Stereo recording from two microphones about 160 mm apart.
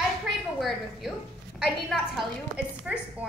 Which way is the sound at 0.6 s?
Centre (ahead or behind).